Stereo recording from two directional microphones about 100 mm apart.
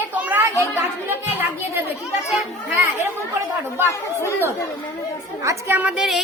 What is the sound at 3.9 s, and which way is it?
Speech, 25° left (ahead or behind).